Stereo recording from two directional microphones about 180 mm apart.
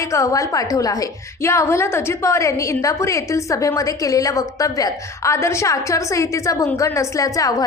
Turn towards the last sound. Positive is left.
turn(degrees=20)  # may be behind; listen again after turning